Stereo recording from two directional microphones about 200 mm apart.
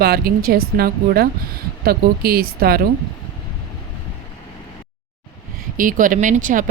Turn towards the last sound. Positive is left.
turn(degrees=-40)  # may be behind; listen again after turning